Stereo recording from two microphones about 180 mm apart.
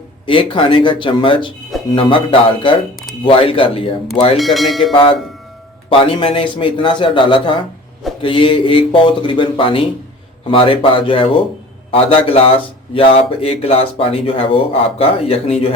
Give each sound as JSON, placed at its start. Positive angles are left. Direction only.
{"t": 0.3, "sound": "a man's voice", "side_deg": 30}
{"t": 4.4, "sound": "speech", "side_deg": 0}
{"t": 5.9, "sound": "a man's voice", "side_deg": 30}